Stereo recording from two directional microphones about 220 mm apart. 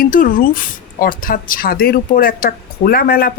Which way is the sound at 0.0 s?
40° left (ahead or behind).